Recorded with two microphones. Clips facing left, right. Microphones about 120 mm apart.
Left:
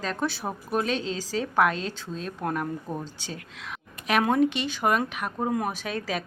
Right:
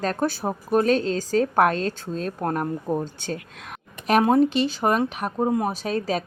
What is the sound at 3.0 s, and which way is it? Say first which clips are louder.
Speech: right 8 dB; 50° right (ahead or behind).